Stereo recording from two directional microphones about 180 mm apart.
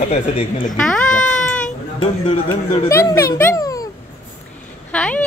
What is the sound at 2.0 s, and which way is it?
Speech, 30° left (ahead or behind).